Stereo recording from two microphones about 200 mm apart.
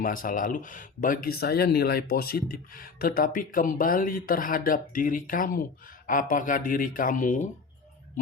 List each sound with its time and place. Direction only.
0.0 s speech: 45° left (ahead or behind)